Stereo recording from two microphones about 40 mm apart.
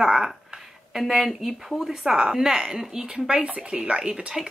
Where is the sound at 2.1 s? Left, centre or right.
Centre.